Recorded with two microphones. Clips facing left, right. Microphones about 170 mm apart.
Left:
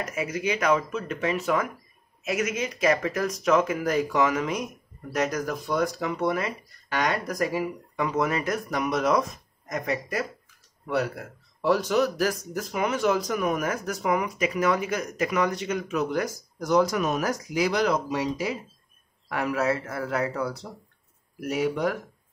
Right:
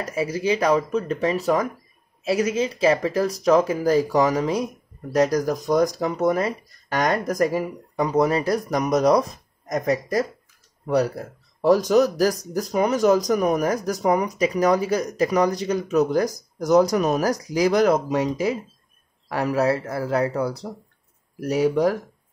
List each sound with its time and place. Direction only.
0.0 s speech: 30° right (ahead or behind); by 18.5 s 45° right (ahead or behind)
19.2 s speech: 35° right (ahead or behind)